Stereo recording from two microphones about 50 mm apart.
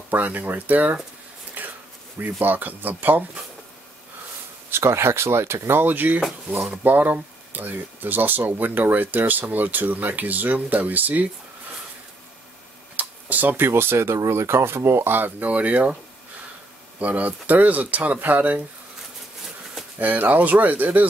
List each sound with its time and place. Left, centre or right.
0.1 s speech: right
1.6 s bee: right
2.4 s speech: right
4.6 s speech: right
12.9 s computer keyboard: right
13.7 s speech: right
17.0 s speech: right
20.0 s speech: right